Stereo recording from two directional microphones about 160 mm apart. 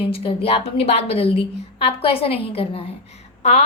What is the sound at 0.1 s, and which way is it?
A woman's voice, 35° left (ahead or behind).